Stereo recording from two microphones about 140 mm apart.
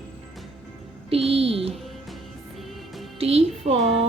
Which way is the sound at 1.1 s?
45° right (ahead or behind).